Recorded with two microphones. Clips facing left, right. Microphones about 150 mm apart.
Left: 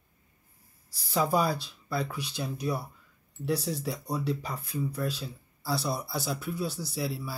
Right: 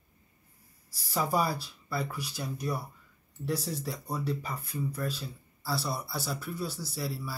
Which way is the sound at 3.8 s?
10° left (ahead or behind).